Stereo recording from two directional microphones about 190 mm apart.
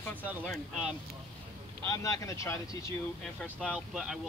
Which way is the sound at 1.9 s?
15° left (ahead or behind).